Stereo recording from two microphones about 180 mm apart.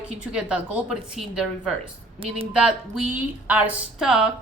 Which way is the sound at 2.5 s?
5° right (ahead or behind).